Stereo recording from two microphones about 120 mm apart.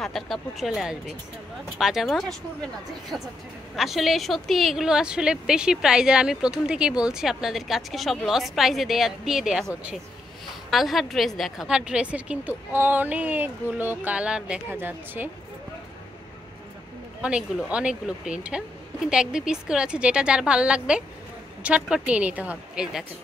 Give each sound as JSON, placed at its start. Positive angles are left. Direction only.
{"t": 0.0, "sound": "a woman's voice", "side_deg": 0}
{"t": 10.7, "sound": "a woman's voice", "side_deg": 0}
{"t": 17.2, "sound": "a woman's voice", "side_deg": -10}